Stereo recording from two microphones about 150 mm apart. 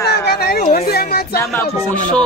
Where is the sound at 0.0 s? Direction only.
90° left.